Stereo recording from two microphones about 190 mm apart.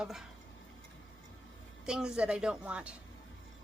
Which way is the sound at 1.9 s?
5° right (ahead or behind).